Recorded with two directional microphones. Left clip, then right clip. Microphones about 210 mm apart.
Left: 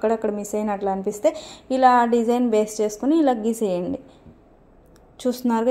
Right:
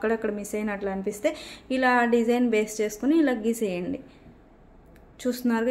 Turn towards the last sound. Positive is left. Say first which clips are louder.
# left 5 dB
turn(degrees=20)  # may be behind; listen again after turning